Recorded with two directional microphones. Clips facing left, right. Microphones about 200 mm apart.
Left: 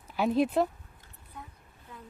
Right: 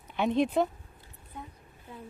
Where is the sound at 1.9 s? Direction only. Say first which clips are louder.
Right 4 dB; 25° right (ahead or behind).